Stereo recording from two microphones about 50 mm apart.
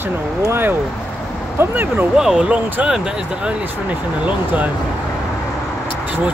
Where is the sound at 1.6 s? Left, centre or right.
Right.